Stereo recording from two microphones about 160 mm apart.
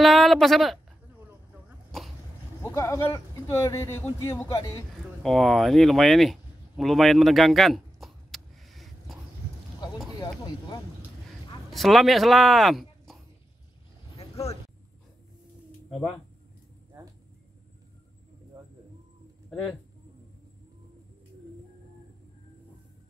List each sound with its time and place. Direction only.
0.0 s speech: centre (ahead or behind)
2.6 s speech: 20° left (ahead or behind)
5.2 s a sound: centre (ahead or behind)
10.1 s speech: 25° left (ahead or behind)
11.7 s speech: centre (ahead or behind)